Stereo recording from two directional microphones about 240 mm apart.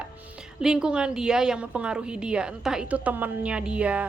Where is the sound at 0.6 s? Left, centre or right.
Centre.